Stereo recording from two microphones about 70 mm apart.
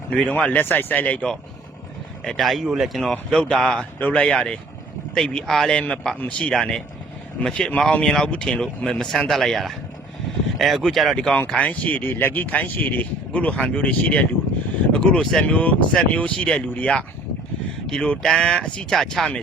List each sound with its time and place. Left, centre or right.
0.1 s speech: centre
2.2 s speech: centre
3.0 s speech: centre
3.9 s speech: left; by 11.2 s centre
11.5 s speech: left
17.8 s speech: centre